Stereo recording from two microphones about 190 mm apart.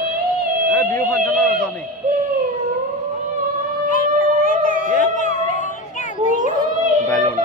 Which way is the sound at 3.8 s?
45° left (ahead or behind).